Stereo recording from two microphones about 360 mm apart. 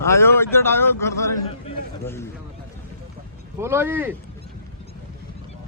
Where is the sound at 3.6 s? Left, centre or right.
Centre.